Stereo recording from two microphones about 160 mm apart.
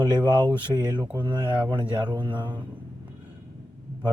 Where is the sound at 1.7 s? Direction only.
30° right (ahead or behind).